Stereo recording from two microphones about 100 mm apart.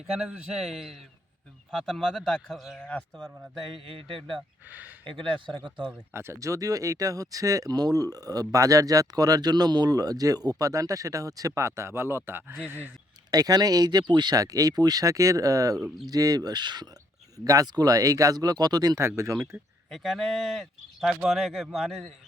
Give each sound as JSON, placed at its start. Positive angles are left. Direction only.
{"t": 0.2, "sound": "speech", "side_deg": -10}
{"t": 3.2, "sound": "speech", "side_deg": -5}
{"t": 3.8, "sound": "speech", "side_deg": -60}
{"t": 6.1, "sound": "speech", "side_deg": -30}
{"t": 13.3, "sound": "speech", "side_deg": -40}
{"t": 19.9, "sound": "speech", "side_deg": 0}